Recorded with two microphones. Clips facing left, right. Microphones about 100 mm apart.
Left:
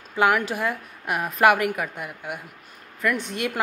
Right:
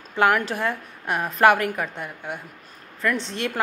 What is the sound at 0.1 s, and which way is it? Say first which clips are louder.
A woman's voice: right 1 dB; 10° left (ahead or behind).